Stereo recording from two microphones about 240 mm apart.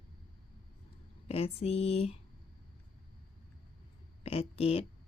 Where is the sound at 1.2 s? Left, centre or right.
Left.